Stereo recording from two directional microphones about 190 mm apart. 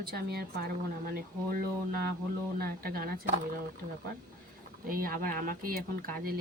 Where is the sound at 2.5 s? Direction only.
55° right (ahead or behind).